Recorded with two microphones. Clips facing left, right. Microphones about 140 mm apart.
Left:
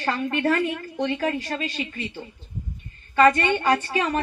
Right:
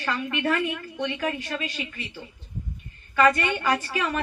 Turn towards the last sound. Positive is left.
turn(degrees=25)  # may be behind; listen again after turning